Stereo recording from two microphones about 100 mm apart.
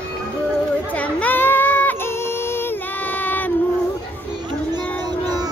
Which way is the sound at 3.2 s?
15° left (ahead or behind).